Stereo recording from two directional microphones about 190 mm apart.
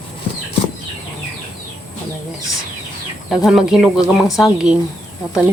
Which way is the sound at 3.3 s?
Centre (ahead or behind).